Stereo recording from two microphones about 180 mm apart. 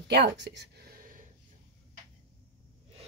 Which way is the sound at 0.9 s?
50° right (ahead or behind).